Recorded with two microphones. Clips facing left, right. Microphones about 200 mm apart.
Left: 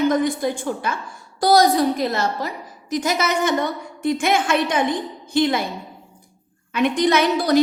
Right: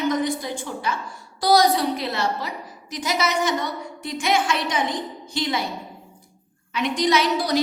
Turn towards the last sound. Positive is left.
turn(degrees=55)  # may be behind; listen again after turning